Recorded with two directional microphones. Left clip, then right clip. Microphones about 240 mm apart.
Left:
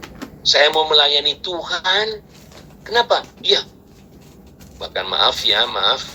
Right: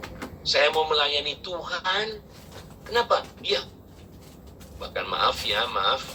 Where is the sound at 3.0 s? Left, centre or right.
Left.